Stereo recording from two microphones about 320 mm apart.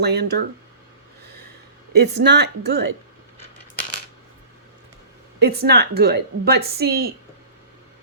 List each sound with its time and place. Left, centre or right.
0.0 s speech: right
2.0 s speech: right
5.4 s speech: right